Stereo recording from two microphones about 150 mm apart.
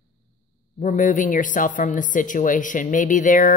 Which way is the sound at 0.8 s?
60° left (ahead or behind).